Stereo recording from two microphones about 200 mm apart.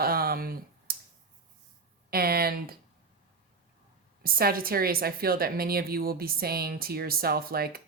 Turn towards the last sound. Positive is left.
turn(degrees=-50)  # may be behind; listen again after turning